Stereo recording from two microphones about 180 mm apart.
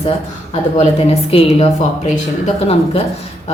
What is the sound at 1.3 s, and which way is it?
Speech, 35° left (ahead or behind).